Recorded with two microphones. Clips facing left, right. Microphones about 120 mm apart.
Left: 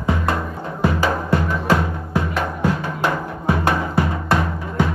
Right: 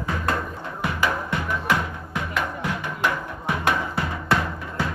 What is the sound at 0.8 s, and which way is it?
Music, 30° left (ahead or behind).